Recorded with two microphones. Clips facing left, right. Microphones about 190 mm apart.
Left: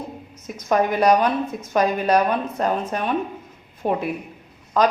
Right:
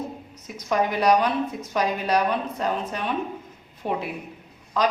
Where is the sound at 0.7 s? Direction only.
50° left (ahead or behind).